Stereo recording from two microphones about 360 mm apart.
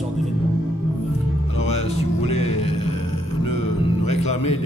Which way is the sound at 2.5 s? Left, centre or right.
Left.